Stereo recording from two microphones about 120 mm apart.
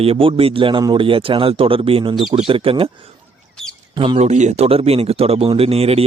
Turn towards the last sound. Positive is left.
turn(degrees=-55)  # may be behind; listen again after turning